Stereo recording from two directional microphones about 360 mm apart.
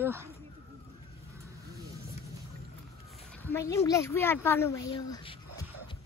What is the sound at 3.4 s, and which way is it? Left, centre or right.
Speech, centre.